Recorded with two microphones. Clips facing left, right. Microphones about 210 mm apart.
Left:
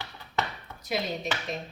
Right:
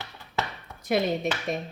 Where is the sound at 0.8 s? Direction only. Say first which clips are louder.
Right 6 dB; 55° right (ahead or behind).